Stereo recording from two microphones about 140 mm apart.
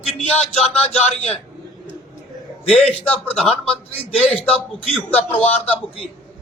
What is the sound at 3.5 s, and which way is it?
Speech, 40° left (ahead or behind).